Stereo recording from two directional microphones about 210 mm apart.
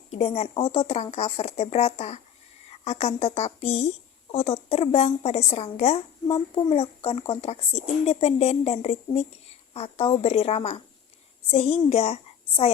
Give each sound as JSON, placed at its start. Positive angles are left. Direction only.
{"t": 0.1, "sound": "a woman's voice", "side_deg": 30}